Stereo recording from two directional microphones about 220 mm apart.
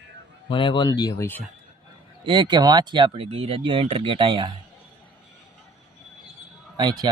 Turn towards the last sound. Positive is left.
turn(degrees=-20)  # may be behind; listen again after turning